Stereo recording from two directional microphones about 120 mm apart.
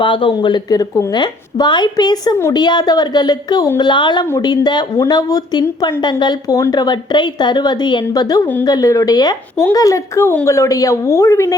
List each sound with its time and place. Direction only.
0.0 s a woman's voice: 45° left (ahead or behind); by 1.1 s 30° left (ahead or behind)
1.1 s a woman's voice: 40° left (ahead or behind)